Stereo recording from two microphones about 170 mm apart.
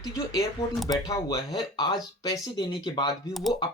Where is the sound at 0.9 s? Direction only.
20° left (ahead or behind).